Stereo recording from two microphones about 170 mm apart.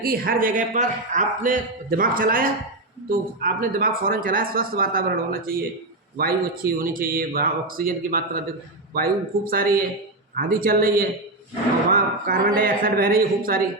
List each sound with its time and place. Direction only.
0.0 s a man's voice: 60° right (ahead or behind)